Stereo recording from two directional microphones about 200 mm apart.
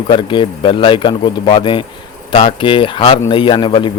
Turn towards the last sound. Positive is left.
turn(degrees=25)  # may be behind; listen again after turning